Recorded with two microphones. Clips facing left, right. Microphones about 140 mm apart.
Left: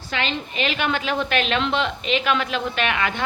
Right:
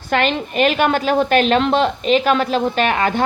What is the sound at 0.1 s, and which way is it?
A woman's voice, 55° right (ahead or behind).